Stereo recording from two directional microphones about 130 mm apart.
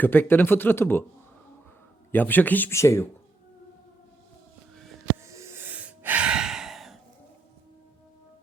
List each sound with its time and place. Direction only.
0.0 s speech: 15° left (ahead or behind)
2.1 s speech: 15° left (ahead or behind)
5.2 s gasp: 25° right (ahead or behind); by 7.0 s centre (ahead or behind)